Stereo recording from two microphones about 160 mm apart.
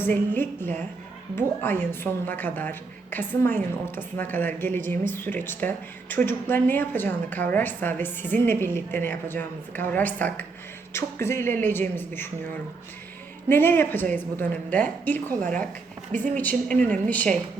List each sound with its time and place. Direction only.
0.0 s a woman's voice: 15° left (ahead or behind)
13.5 s a woman's voice: 15° left (ahead or behind)
16.1 s a woman's voice: 55° right (ahead or behind)
16.4 s a woman's voice: 10° left (ahead or behind)